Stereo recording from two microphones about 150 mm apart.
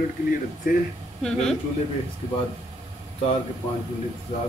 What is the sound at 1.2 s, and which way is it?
Speech, 5° left (ahead or behind).